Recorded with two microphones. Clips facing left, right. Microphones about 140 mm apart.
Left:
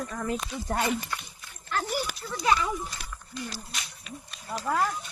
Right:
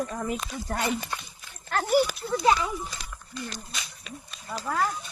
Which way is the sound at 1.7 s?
55° right (ahead or behind).